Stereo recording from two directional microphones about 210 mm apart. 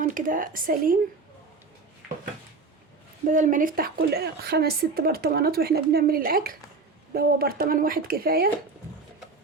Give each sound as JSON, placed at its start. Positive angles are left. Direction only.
{"t": 0.0, "sound": "speech", "side_deg": -40}
{"t": 3.2, "sound": "a woman's voice", "side_deg": -40}